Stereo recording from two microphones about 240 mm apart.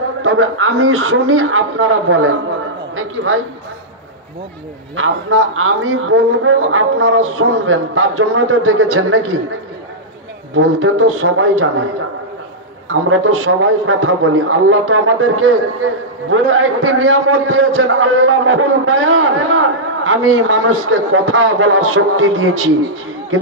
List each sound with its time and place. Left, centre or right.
0.2 s a man's voice: right
4.9 s a man's voice: right
10.5 s a man's voice: right
12.8 s a man's voice: right